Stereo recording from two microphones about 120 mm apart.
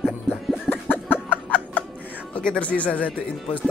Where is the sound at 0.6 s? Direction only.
15° left (ahead or behind).